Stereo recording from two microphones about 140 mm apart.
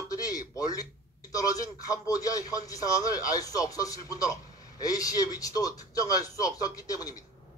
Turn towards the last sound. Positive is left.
turn(degrees=25)  # may be behind; listen again after turning